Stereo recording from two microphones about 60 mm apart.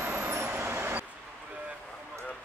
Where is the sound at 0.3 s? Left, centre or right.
Right.